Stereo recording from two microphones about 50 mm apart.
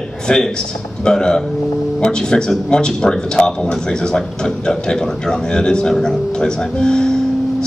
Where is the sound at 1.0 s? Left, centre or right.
Centre.